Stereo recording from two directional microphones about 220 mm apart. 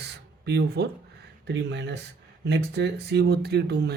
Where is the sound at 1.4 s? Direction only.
50° right (ahead or behind).